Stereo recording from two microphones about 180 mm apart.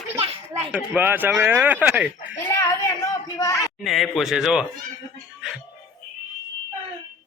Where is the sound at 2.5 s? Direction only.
20° left (ahead or behind).